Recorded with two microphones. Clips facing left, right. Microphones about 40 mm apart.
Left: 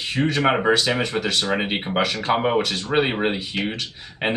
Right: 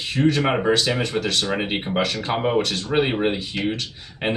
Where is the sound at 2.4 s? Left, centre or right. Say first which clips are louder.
Right 1 dB; centre.